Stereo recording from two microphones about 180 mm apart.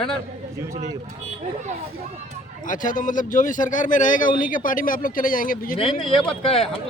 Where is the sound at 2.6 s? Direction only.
45° left (ahead or behind).